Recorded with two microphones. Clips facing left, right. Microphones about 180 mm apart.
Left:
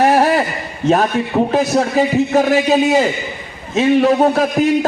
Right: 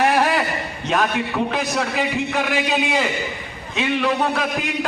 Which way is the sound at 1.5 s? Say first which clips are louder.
Left 8 dB; 40° left (ahead or behind).